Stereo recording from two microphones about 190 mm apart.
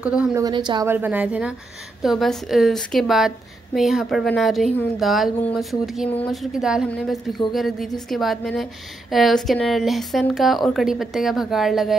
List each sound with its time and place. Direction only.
0.0 s a woman's voice: 5° right (ahead or behind)
0.3 s a woman's voice: 20° right (ahead or behind)
0.8 s a woman's voice: 10° right (ahead or behind)